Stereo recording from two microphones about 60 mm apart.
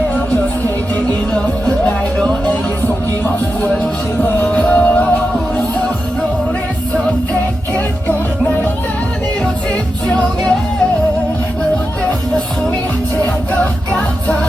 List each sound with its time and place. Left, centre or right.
1.3 s music: centre
4.5 s music: left